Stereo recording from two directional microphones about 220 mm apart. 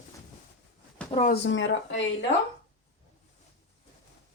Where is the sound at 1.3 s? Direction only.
55° left (ahead or behind).